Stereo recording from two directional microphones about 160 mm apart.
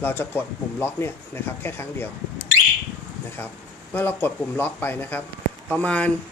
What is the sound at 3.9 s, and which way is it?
Speech, 10° left (ahead or behind).